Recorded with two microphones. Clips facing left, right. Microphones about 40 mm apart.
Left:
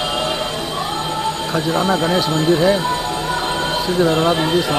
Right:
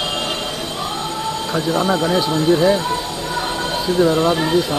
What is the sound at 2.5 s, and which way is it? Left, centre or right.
Speech, centre.